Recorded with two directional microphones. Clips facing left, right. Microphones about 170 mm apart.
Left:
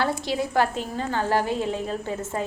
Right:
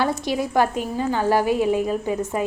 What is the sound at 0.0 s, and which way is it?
Speech, 15° right (ahead or behind).